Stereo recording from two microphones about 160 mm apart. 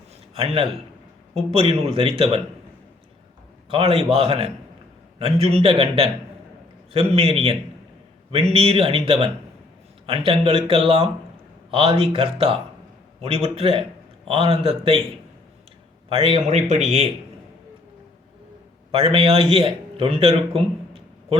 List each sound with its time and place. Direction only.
0.3 s speech: 35° right (ahead or behind)
3.7 s speech: 35° right (ahead or behind)
16.0 s speech: 35° right (ahead or behind)
18.9 s a man's voice: 35° right (ahead or behind)